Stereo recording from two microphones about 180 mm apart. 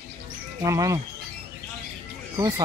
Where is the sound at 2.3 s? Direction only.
20° right (ahead or behind).